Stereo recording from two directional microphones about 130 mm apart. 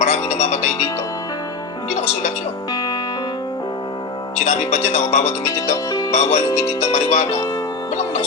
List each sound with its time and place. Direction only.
0.0 s speech: 60° left (ahead or behind)
1.9 s music: 60° left (ahead or behind)
4.4 s speech: 60° left (ahead or behind)
5.5 s music: 25° left (ahead or behind)
6.1 s speech: 60° left (ahead or behind)
6.5 s speech: 25° left (ahead or behind)
6.8 s speech: 60° left (ahead or behind)